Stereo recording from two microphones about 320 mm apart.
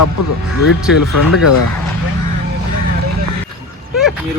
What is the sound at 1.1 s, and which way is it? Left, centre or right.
Speech, left.